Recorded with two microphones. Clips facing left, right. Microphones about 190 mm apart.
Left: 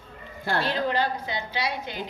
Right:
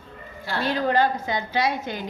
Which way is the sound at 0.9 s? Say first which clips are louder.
Right 5 dB; 45° right (ahead or behind).